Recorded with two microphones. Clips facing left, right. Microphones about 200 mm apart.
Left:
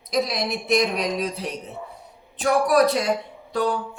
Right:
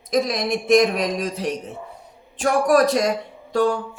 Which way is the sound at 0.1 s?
50° right (ahead or behind).